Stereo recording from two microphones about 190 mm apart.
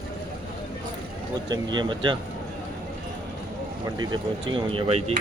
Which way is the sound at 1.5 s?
25° right (ahead or behind).